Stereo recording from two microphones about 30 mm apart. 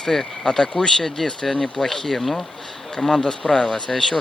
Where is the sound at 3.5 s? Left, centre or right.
Left.